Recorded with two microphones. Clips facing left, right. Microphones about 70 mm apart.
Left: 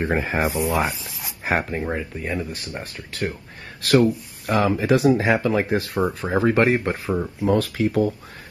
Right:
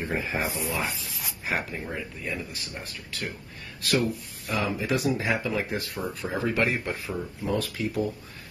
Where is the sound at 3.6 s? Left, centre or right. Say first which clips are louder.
Left 9 dB; left.